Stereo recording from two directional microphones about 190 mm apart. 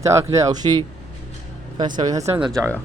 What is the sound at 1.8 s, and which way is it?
Speech, 20° right (ahead or behind).